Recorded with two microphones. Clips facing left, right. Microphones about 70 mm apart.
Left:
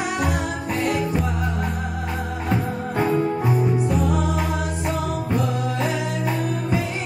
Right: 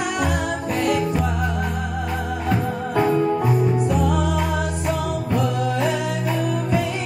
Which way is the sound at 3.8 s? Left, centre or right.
Right.